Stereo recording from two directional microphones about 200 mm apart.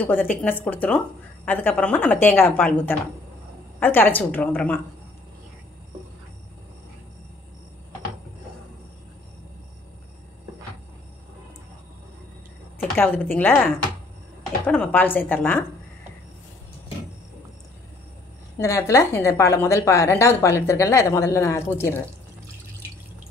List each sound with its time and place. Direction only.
0.0 s a woman's voice: 10° left (ahead or behind)
12.8 s a woman's voice: 10° left (ahead or behind)
18.6 s a woman's voice: 15° left (ahead or behind)